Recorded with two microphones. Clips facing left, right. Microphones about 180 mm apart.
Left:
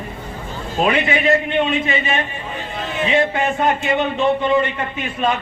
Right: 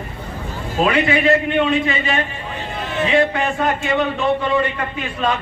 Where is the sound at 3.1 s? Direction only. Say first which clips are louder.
Right 1 dB; 25° left (ahead or behind).